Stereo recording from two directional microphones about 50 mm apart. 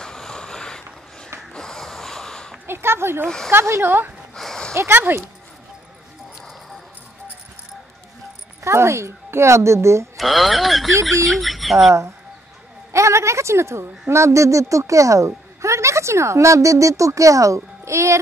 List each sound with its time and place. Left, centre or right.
0.0 s a sound: centre
1.5 s snort: centre
2.6 s speech: right
3.5 s a woman's voice: right
3.8 s speech: right
4.4 s a sound: centre
4.7 s speech: right
8.6 s a woman's voice: right
10.1 s speech: centre
12.9 s a woman's voice: right
17.8 s a woman's voice: right